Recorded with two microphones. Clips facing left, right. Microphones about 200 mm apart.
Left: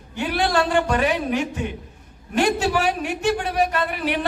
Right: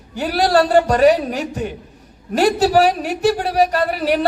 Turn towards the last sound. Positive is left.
turn(degrees=-40)  # may be behind; listen again after turning